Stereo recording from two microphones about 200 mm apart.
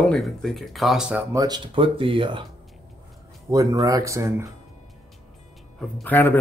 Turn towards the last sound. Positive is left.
turn(degrees=10)  # may be behind; listen again after turning